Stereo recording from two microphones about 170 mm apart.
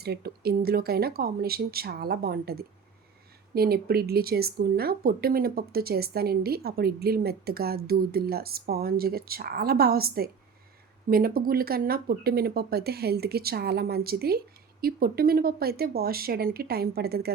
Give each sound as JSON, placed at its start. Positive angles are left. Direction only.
{"t": 0.0, "sound": "a woman's voice", "side_deg": -70}